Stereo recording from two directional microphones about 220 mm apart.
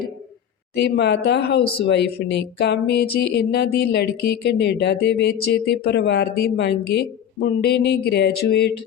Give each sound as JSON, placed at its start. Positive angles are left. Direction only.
{"t": 0.8, "sound": "speech", "side_deg": 50}